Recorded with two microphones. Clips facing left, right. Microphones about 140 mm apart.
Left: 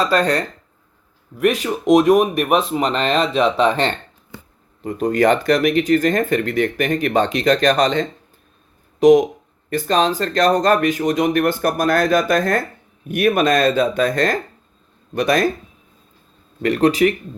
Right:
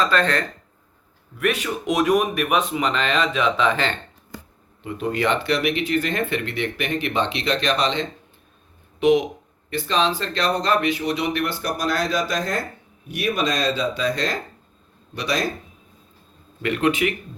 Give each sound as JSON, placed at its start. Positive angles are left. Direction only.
{"t": 0.0, "sound": "speech", "side_deg": 35}
{"t": 16.6, "sound": "speech", "side_deg": 40}